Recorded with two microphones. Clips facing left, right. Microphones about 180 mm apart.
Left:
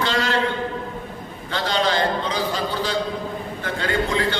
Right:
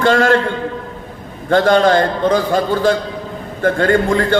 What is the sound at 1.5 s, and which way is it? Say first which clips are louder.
A man's voice: right 11 dB; 50° right (ahead or behind).